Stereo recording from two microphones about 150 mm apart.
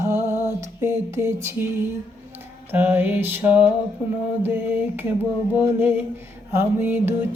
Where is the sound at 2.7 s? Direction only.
15° right (ahead or behind).